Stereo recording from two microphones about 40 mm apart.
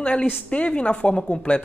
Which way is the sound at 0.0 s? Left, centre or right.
Left.